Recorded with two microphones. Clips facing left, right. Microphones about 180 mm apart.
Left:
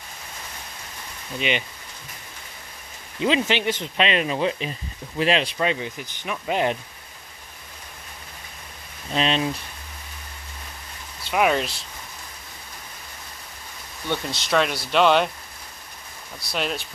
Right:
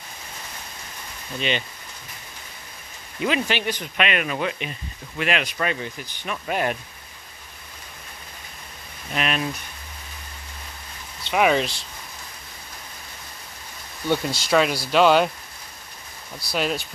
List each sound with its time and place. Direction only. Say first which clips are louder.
1.4 s speech: left 1 dB; 15° left (ahead or behind)
3.2 s speech: left 2 dB; 25° left (ahead or behind)
9.1 s speech: left 3 dB; 25° left (ahead or behind)
11.2 s speech: right 1 dB; centre (ahead or behind)
14.0 s speech: right 4 dB; 5° right (ahead or behind)
16.5 s speech: right 3 dB; centre (ahead or behind)